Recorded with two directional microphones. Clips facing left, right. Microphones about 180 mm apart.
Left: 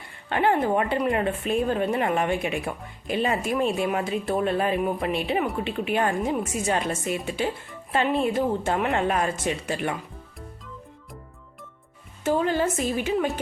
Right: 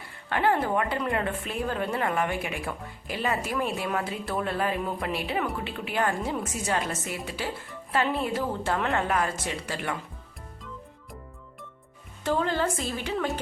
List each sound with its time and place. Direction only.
0.3 s a woman's voice: 20° left (ahead or behind)
12.2 s a woman's voice: 15° left (ahead or behind)